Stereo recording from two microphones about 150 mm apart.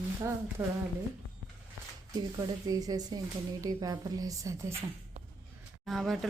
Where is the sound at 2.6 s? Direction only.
25° right (ahead or behind).